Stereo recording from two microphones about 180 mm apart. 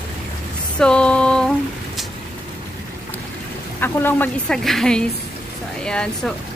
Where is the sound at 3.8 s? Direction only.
10° left (ahead or behind).